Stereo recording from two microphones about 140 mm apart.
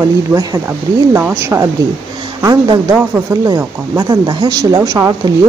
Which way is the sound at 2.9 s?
15° right (ahead or behind).